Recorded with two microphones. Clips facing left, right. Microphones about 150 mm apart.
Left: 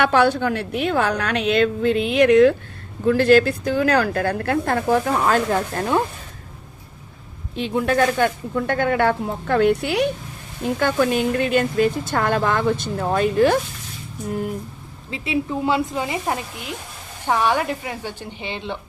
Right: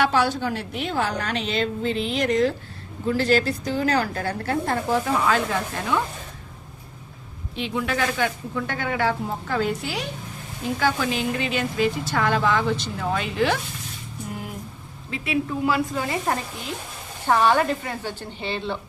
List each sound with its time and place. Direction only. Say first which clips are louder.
0.0 s a woman's voice: left 4 dB; 60° left (ahead or behind); by 6.0 s 45° left (ahead or behind)
7.5 s speech: left 6 dB; 45° left (ahead or behind)
15.1 s a woman's voice: left 2 dB; 25° left (ahead or behind)
16.2 s speech: left 1 dB; 10° left (ahead or behind)